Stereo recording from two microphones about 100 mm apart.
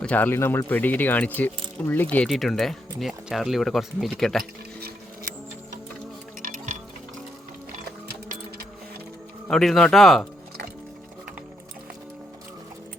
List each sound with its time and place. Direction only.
0.0 s speech: 15° left (ahead or behind)
2.2 s speech: centre (ahead or behind)
9.5 s speech: 5° left (ahead or behind)